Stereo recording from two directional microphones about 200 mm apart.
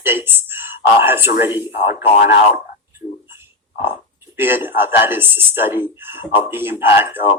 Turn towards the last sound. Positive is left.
turn(degrees=-10)  # may be behind; listen again after turning